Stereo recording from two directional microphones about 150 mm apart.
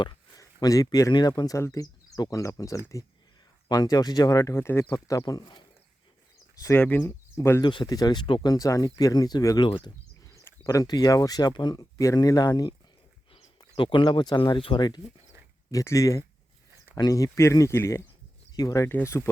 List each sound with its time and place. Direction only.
0.0 s speech: 25° left (ahead or behind)
6.6 s speech: 15° left (ahead or behind)
7.6 s speech: 30° left (ahead or behind)
10.2 s speech: 20° left (ahead or behind)